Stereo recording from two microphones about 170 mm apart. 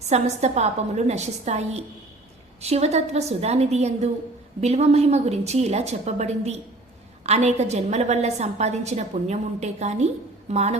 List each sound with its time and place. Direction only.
0.1 s a woman's voice: 40° right (ahead or behind)